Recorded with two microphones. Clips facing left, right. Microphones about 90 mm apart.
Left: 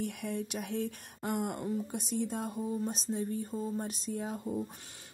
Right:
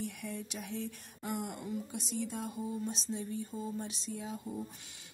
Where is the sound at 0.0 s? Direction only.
60° left (ahead or behind).